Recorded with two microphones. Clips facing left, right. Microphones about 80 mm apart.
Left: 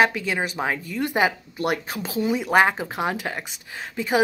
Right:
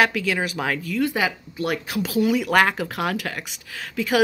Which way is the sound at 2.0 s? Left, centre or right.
Left.